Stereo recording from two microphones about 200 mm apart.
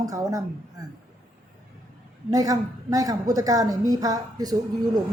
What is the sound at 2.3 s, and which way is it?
A woman's voice, 20° right (ahead or behind).